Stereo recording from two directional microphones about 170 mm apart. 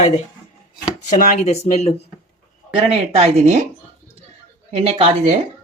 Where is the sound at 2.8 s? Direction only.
35° right (ahead or behind).